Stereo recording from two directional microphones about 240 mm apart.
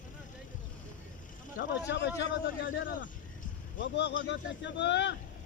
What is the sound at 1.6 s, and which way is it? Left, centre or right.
Vehicle, left.